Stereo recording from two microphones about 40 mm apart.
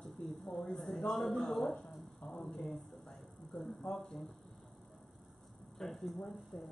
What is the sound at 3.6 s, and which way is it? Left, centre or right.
Speech, centre.